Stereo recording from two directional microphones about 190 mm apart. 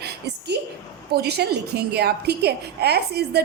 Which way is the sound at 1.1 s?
55° right (ahead or behind).